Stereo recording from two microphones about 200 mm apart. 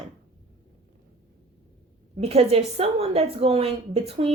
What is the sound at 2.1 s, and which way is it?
A woman's voice, 30° right (ahead or behind).